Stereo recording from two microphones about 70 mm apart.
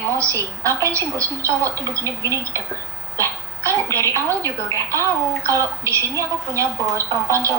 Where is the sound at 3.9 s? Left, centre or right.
Right.